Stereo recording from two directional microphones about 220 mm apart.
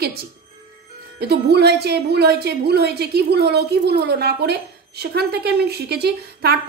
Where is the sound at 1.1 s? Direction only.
50° right (ahead or behind).